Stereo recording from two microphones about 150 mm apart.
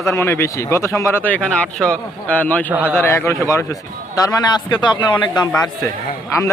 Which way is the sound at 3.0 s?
15° left (ahead or behind).